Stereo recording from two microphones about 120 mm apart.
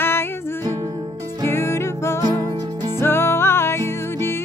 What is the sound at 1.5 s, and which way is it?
Music, 20° left (ahead or behind).